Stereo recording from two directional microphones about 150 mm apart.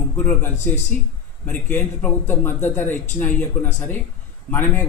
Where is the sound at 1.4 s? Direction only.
10° left (ahead or behind).